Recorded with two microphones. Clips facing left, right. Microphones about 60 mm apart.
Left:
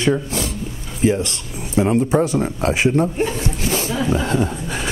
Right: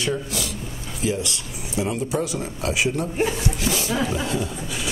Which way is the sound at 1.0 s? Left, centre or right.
Left.